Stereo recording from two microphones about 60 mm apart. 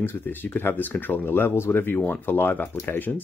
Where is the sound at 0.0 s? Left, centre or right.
Left.